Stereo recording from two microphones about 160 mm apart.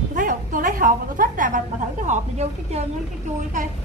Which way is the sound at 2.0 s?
45° right (ahead or behind).